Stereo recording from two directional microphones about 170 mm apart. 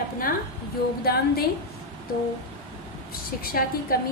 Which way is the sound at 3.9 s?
60° left (ahead or behind).